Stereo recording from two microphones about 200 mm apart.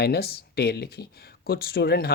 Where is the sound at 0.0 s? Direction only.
50° left (ahead or behind).